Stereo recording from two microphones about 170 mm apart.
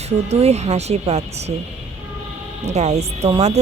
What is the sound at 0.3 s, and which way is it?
Speech, 40° right (ahead or behind).